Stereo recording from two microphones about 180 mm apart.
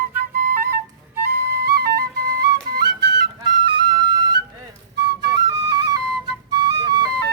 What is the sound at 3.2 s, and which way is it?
Flute, 25° right (ahead or behind).